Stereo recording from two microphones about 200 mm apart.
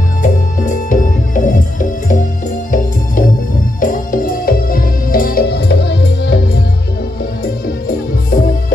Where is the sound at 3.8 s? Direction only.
45° left (ahead or behind).